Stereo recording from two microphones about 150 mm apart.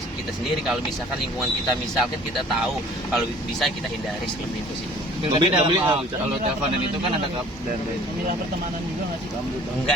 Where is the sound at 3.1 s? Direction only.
Centre (ahead or behind).